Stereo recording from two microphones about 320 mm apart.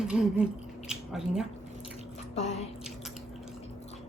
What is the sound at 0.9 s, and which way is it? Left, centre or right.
Speech, centre.